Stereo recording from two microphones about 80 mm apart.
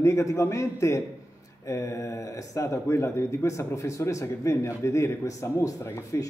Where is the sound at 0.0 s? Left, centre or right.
Left.